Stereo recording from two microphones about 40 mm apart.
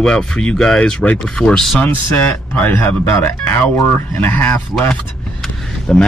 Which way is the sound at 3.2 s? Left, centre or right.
Left.